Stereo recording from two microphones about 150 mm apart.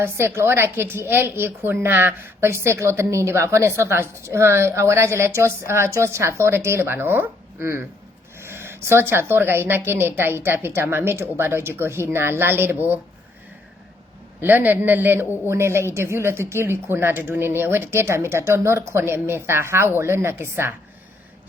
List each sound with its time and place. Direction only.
0.0 s a woman's voice: 15° right (ahead or behind)
14.4 s a woman's voice: 10° right (ahead or behind)